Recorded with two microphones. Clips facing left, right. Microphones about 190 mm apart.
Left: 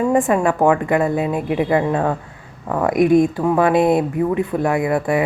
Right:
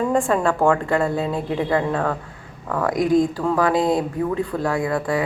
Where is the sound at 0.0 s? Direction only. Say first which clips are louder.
Left 3 dB; 15° left (ahead or behind).